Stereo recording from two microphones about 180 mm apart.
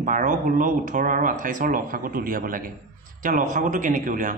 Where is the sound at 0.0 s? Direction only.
45° right (ahead or behind).